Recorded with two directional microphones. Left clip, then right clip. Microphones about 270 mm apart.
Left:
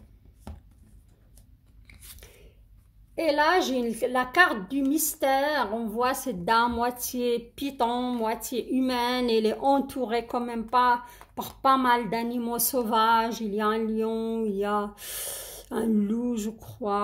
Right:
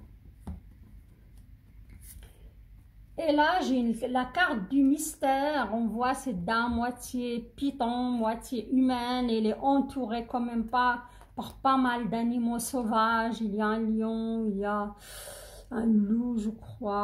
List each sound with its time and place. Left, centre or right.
3.3 s a woman's voice: left